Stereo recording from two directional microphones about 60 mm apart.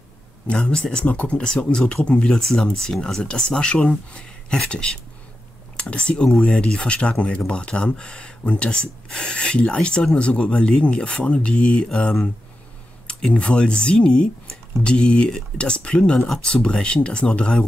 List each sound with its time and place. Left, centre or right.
0.6 s speech: centre
1.0 s speech: left